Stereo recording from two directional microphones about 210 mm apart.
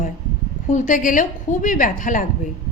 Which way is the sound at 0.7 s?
35° left (ahead or behind).